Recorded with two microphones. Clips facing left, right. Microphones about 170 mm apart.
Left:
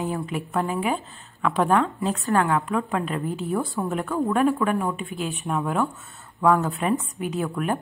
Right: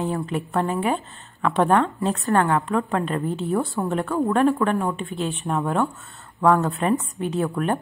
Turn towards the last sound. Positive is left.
turn(degrees=0)  # may be behind; listen again after turning